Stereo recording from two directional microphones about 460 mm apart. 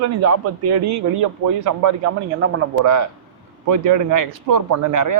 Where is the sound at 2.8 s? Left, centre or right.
Right.